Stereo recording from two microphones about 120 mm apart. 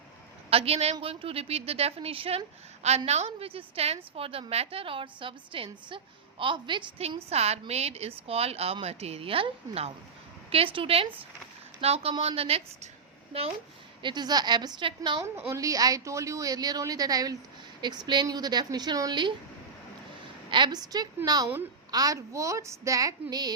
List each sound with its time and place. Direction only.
0.5 s a woman's voice: 55° right (ahead or behind)
7.3 s a woman's voice: 60° right (ahead or behind)
14.0 s a woman's voice: 35° right (ahead or behind)
15.2 s a woman's voice: 25° right (ahead or behind)
20.5 s a woman's voice: 40° right (ahead or behind)